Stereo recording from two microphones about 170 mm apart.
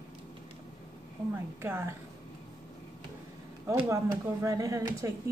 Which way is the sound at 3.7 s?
20° right (ahead or behind).